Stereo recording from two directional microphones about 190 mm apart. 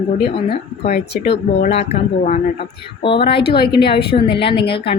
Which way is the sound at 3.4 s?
55° left (ahead or behind).